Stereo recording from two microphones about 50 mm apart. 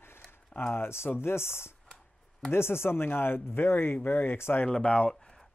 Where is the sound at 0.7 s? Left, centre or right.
Left.